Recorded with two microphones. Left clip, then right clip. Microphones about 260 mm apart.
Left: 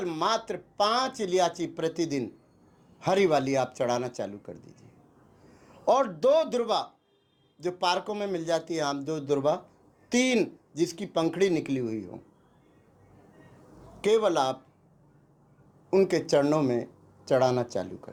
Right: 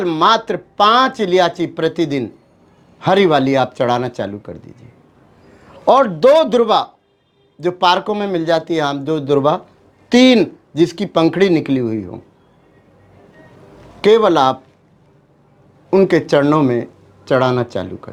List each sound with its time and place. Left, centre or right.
0.0 s speech: right
5.8 s speech: right
14.0 s speech: right
15.9 s speech: right